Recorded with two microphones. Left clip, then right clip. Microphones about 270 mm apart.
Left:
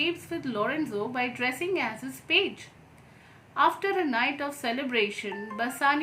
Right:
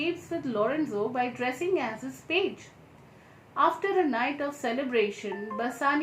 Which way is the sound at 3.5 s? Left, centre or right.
Centre.